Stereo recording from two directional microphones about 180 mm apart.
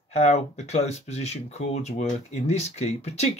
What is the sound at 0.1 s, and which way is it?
Speech, 40° left (ahead or behind).